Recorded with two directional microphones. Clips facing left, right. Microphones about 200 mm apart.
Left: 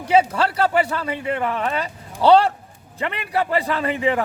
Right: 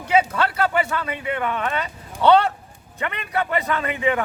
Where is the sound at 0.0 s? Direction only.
30° left (ahead or behind).